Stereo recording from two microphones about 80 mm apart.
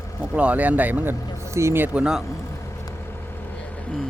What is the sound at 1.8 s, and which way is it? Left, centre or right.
Speech, centre.